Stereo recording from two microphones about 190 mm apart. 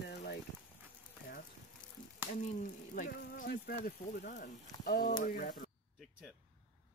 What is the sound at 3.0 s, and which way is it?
Speech, 50° left (ahead or behind).